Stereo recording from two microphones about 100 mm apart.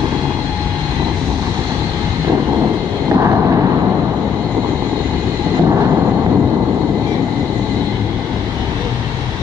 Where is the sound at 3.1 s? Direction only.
25° right (ahead or behind).